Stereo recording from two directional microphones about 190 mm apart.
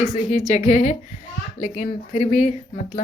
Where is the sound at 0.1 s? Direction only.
35° left (ahead or behind).